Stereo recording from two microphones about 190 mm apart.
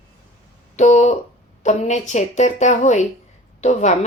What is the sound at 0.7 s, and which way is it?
A woman's voice, 35° left (ahead or behind).